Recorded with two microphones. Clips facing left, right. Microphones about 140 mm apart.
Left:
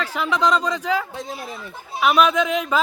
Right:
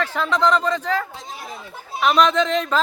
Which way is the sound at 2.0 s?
10° left (ahead or behind).